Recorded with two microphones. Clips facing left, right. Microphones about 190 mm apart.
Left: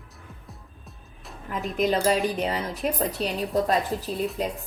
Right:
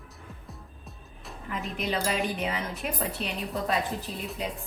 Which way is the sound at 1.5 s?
45° left (ahead or behind).